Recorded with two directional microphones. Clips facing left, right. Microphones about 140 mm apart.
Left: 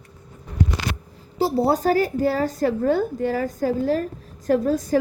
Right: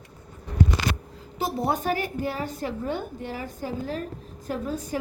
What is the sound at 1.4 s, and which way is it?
A woman's voice, 35° left (ahead or behind).